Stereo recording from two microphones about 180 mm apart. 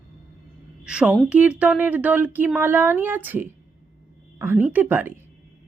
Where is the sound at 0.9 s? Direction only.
5° right (ahead or behind).